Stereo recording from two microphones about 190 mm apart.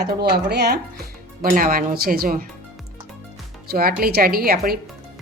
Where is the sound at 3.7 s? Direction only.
50° right (ahead or behind).